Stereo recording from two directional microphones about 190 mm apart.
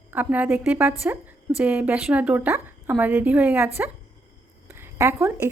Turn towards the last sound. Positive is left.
turn(degrees=-15)  # may be behind; listen again after turning